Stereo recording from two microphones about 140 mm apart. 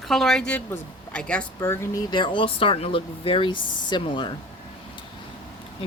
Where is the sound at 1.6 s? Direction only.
20° left (ahead or behind); by 4.3 s 35° left (ahead or behind).